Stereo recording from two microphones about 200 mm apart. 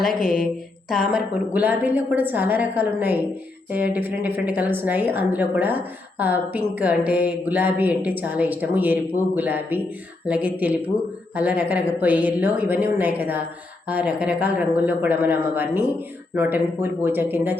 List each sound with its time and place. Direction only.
0.0 s a woman's voice: 45° left (ahead or behind)
1.1 s a woman's voice: 10° right (ahead or behind)